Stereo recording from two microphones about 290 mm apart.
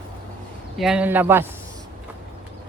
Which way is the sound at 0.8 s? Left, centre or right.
Centre.